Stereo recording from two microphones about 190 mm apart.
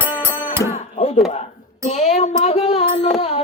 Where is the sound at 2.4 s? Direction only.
35° left (ahead or behind).